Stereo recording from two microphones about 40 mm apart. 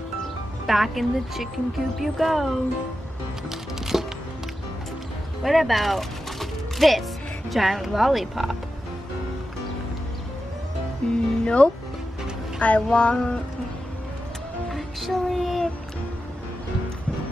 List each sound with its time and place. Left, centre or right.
0.7 s speech: centre
3.4 s music: centre
5.4 s speech: centre
11.0 s music: left
11.4 s a sound: left
12.5 s speech: left
12.9 s a sound: left
14.7 s music: centre